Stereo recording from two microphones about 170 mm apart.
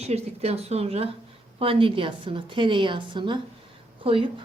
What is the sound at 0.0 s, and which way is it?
A woman's voice, 40° right (ahead or behind).